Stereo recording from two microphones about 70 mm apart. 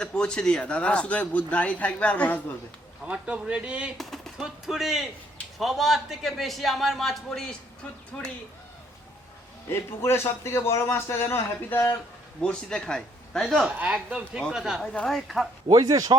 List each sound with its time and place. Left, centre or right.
0.0 s a man's voice: centre
3.1 s speech: centre
3.9 s a sound: centre
4.4 s a man's voice: centre
9.6 s a man's voice: left
12.4 s a man's voice: centre
13.7 s a man's voice: centre
15.7 s speech: right